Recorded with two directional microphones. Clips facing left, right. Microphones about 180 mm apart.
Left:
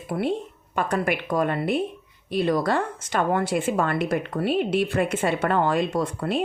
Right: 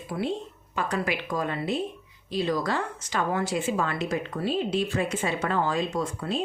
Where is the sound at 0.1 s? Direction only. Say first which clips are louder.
Left 4 dB; 55° left (ahead or behind).